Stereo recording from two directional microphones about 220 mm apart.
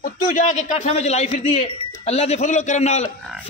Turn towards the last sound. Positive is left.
turn(degrees=30)  # may be behind; listen again after turning